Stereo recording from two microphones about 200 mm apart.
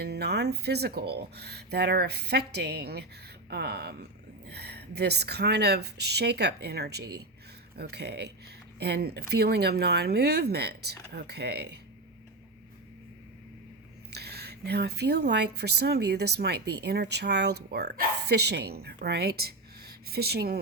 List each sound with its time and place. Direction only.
0.0 s speech: 55° right (ahead or behind)
14.1 s speech: 55° right (ahead or behind)